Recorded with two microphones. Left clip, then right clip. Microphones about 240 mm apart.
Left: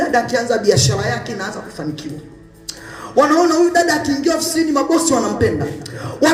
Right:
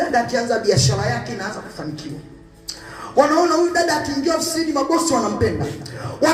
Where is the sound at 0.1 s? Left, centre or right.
Left.